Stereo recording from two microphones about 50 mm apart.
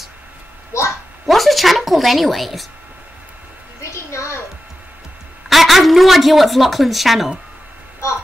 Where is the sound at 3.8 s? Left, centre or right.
Left.